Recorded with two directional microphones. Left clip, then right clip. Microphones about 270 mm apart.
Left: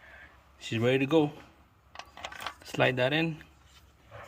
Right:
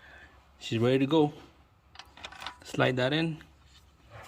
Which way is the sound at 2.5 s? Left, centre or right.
Centre.